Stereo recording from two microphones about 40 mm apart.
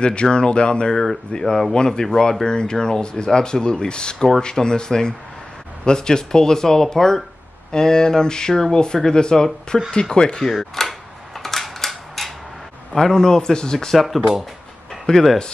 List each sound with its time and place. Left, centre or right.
0.0 s speech: left
1.4 s speech: centre
1.7 s speech: centre
10.6 s a sound: centre
12.9 s speech: centre
13.9 s speech: centre
15.1 s speech: left